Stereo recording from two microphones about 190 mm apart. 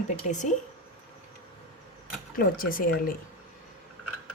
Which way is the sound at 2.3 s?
50° left (ahead or behind).